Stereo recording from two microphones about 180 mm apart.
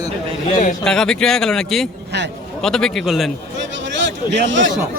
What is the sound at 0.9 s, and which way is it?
Speech, 5° left (ahead or behind).